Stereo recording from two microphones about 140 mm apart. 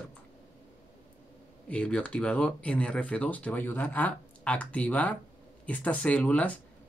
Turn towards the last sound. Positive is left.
turn(degrees=10)  # may be behind; listen again after turning